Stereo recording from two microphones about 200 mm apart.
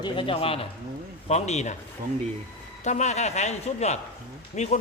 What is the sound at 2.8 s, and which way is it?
A man's voice, 35° left (ahead or behind).